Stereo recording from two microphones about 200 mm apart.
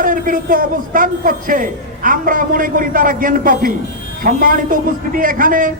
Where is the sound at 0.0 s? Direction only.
45° right (ahead or behind).